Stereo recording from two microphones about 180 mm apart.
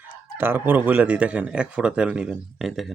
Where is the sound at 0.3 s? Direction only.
10° right (ahead or behind).